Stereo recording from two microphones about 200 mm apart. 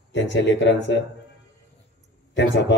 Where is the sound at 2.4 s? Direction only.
60° left (ahead or behind).